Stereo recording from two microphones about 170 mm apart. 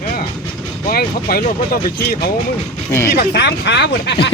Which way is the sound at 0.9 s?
60° left (ahead or behind).